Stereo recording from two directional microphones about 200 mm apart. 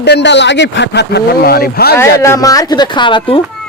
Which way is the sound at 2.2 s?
15° left (ahead or behind).